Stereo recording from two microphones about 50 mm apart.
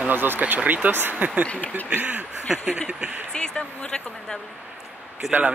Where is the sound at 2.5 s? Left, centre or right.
Centre.